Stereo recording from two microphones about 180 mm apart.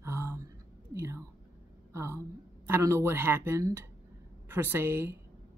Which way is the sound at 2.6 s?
15° right (ahead or behind).